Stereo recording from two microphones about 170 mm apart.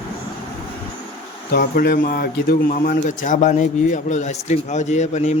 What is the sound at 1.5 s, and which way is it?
A man's voice, 65° left (ahead or behind).